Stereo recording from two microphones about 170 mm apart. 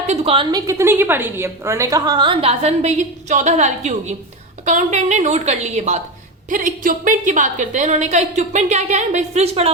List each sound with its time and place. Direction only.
0.1 s a woman's voice: 35° right (ahead or behind)
0.5 s a woman's voice: 15° right (ahead or behind); by 9.6 s 40° right (ahead or behind)